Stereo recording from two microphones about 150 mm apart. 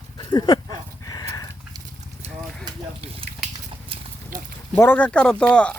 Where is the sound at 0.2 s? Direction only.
30° left (ahead or behind).